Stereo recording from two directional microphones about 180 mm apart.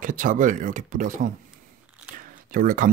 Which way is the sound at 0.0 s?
45° right (ahead or behind).